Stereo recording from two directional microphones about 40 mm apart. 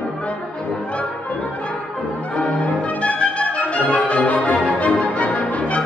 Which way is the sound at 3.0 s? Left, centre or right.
Left.